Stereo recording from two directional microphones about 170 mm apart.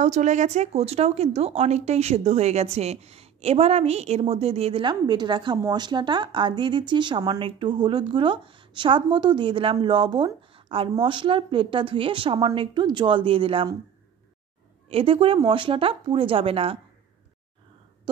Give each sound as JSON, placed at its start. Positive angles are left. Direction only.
{"t": 0.0, "sound": "a woman's voice", "side_deg": -45}
{"t": 14.9, "sound": "speech", "side_deg": -35}
{"t": 18.1, "sound": "a sound", "side_deg": -30}